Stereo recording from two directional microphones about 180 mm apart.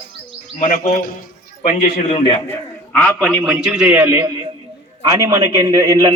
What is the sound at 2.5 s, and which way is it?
A man's voice, 10° left (ahead or behind).